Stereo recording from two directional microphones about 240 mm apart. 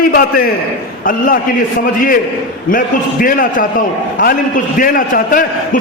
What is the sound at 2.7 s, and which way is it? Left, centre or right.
A man's voice, left.